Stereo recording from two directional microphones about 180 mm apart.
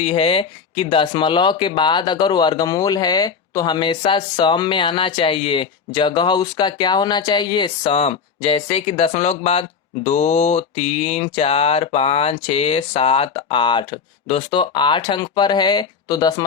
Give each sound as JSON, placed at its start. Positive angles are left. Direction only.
{"t": 0.0, "sound": "speech", "side_deg": 35}